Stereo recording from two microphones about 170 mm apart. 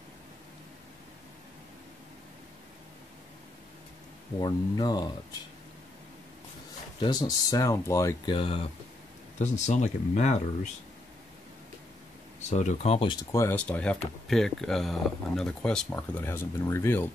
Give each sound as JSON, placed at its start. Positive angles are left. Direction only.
{"t": 4.4, "sound": "speech", "side_deg": 25}
{"t": 7.0, "sound": "speech", "side_deg": 25}
{"t": 8.4, "sound": "speech", "side_deg": 35}
{"t": 9.4, "sound": "speech", "side_deg": 45}
{"t": 12.4, "sound": "speech", "side_deg": 45}
{"t": 13.3, "sound": "speech", "side_deg": 15}